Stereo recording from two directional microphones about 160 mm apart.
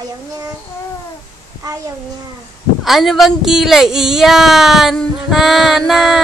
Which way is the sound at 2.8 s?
Centre (ahead or behind).